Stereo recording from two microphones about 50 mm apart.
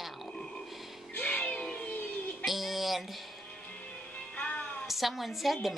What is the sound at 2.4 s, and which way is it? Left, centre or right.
Music, centre.